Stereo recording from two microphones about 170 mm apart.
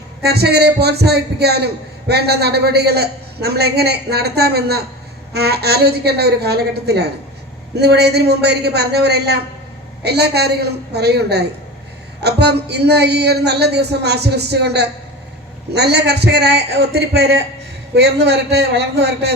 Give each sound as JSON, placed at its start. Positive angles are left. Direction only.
{"t": 0.2, "sound": "a man's voice", "side_deg": -70}
{"t": 17.9, "sound": "a man's voice", "side_deg": -90}